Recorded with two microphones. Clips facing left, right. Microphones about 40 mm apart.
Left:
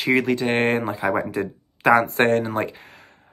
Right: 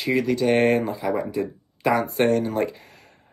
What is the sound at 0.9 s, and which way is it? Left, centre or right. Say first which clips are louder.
Speech: left 2 dB; left.